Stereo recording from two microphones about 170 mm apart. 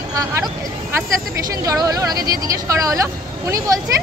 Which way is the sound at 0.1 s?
20° right (ahead or behind).